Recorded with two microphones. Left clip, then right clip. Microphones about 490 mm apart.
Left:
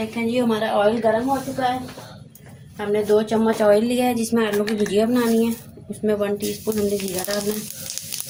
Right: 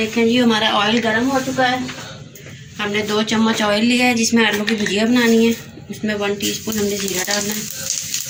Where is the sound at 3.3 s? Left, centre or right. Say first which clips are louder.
Left 1 dB; left.